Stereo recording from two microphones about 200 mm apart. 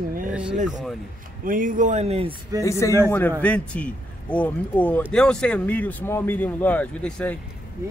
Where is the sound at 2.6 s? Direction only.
15° left (ahead or behind).